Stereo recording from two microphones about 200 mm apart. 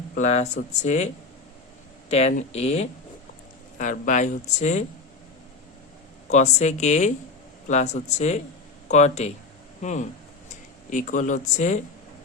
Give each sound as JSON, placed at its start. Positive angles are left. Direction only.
{"t": 0.2, "sound": "speech", "side_deg": 35}
{"t": 6.2, "sound": "speech", "side_deg": 35}